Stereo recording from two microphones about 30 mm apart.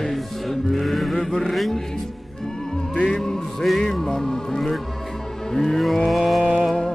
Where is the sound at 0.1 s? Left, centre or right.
Centre.